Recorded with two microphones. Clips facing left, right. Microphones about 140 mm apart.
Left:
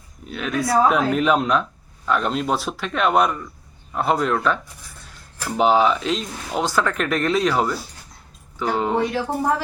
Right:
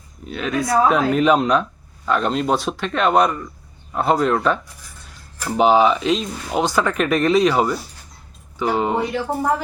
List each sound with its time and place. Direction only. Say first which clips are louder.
0.3 s speech: right 1 dB; centre (ahead or behind)